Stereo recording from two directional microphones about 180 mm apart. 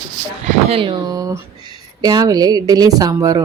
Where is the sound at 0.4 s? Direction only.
40° right (ahead or behind).